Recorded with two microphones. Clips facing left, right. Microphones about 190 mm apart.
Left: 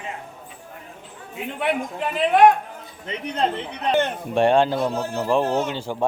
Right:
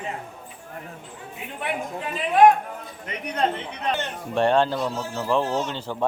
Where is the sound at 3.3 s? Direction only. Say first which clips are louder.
Left 1 dB; 35° left (ahead or behind).